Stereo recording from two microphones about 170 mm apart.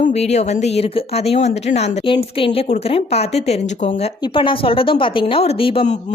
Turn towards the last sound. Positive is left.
turn(degrees=30)  # may be behind; listen again after turning